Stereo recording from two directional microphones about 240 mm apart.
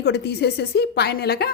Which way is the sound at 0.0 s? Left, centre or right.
Left.